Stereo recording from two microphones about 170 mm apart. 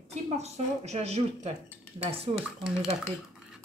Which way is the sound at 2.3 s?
5° right (ahead or behind).